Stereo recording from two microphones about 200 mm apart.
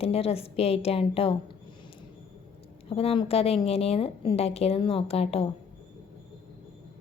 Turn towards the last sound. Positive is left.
turn(degrees=30)  # may be behind; listen again after turning